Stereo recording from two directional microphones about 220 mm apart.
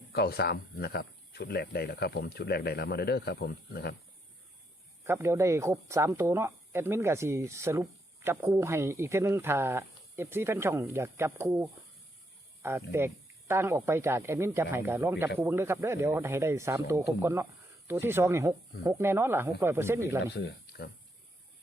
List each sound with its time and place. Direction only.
0.1 s speech: 45° left (ahead or behind)
5.0 s speech: 10° right (ahead or behind)
20.2 s speech: 50° left (ahead or behind)